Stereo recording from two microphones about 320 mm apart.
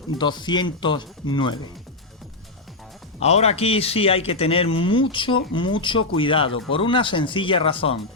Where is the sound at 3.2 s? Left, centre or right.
Centre.